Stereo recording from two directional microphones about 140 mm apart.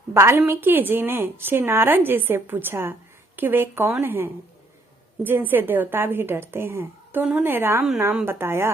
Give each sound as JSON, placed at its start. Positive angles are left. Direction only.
{"t": 0.1, "sound": "a woman's voice", "side_deg": -20}